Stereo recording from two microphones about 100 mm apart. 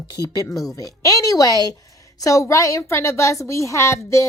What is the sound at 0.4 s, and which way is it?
A woman's voice, 30° left (ahead or behind).